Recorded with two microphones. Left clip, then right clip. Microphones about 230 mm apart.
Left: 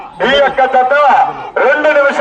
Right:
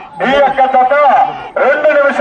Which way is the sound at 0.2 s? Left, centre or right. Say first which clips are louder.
Even; left.